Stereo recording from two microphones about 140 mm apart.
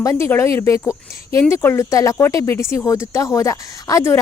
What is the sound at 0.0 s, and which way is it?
Speech, 20° left (ahead or behind).